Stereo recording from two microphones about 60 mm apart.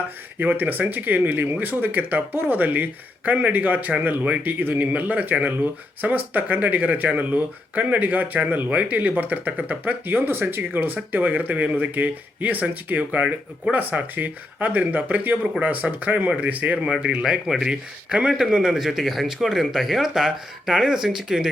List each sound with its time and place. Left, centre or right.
0.3 s speech: right; by 21.5 s centre